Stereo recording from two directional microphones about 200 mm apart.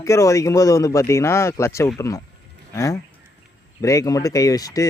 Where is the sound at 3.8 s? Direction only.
15° left (ahead or behind).